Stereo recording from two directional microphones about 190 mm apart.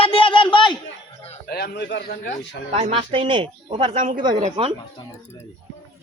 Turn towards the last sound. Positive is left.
turn(degrees=-35)  # may be behind; listen again after turning